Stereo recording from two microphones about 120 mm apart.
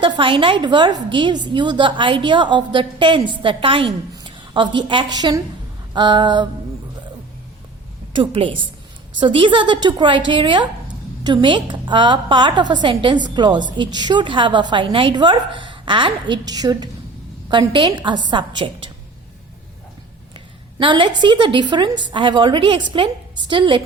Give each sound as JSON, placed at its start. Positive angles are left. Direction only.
{"t": 0.0, "sound": "a woman's voice", "side_deg": -45}
{"t": 8.1, "sound": "a woman's voice", "side_deg": -45}
{"t": 20.3, "sound": "a woman's voice", "side_deg": -40}